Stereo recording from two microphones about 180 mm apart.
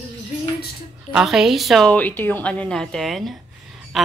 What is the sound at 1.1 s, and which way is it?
A woman's voice, centre (ahead or behind).